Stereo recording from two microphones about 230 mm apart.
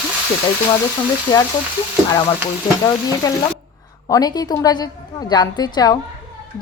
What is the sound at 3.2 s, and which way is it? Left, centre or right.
A woman's voice, centre.